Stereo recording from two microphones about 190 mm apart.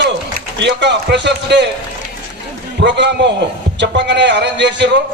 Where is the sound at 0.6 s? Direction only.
65° right (ahead or behind).